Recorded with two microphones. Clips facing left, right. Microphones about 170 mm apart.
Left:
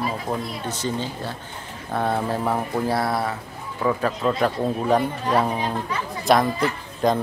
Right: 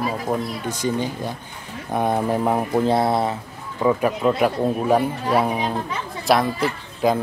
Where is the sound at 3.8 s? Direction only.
10° right (ahead or behind).